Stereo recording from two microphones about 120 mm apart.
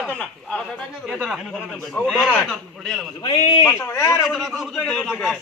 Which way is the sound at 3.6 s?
20° left (ahead or behind).